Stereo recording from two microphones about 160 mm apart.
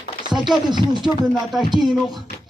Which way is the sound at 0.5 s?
30° right (ahead or behind).